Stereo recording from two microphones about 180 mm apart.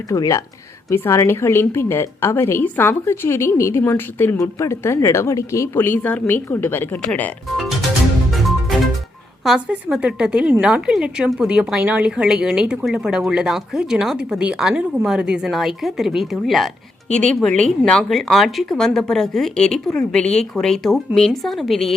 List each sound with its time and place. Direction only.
0.1 s a woman's voice: 15° left (ahead or behind); by 7.9 s centre (ahead or behind)
9.4 s a woman's voice: centre (ahead or behind)